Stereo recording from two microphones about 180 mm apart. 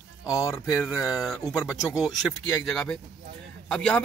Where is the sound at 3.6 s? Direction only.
5° left (ahead or behind).